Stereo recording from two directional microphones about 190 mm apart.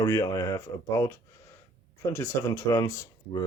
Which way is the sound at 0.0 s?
15° left (ahead or behind).